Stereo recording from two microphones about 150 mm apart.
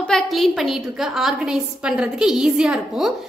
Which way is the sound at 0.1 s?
Centre (ahead or behind).